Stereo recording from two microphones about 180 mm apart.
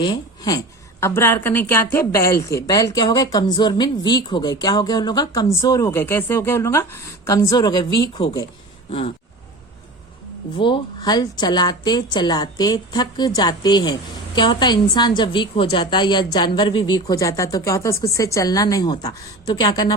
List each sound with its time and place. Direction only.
0.0 s a woman's voice: 25° left (ahead or behind)
8.9 s a sound: 35° left (ahead or behind)
10.6 s speech: 25° left (ahead or behind)